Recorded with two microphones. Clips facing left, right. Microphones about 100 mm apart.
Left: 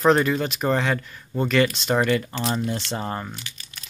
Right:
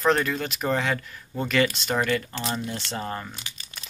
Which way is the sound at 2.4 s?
30° left (ahead or behind).